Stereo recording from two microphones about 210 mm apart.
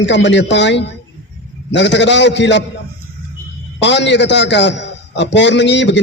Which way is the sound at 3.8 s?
60° left (ahead or behind).